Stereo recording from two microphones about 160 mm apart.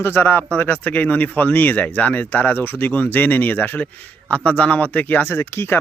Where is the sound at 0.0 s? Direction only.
10° left (ahead or behind).